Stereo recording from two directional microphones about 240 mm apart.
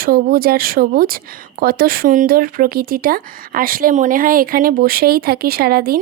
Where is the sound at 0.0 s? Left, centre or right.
Right.